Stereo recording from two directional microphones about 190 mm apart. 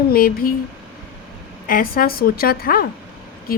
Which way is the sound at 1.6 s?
50° left (ahead or behind).